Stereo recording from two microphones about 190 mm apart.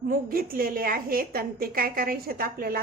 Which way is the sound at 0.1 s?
50° right (ahead or behind).